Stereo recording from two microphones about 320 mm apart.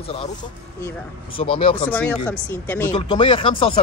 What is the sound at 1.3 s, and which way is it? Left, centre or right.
Speech, centre.